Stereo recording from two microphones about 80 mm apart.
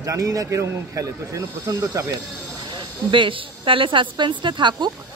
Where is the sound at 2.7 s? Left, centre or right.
Right.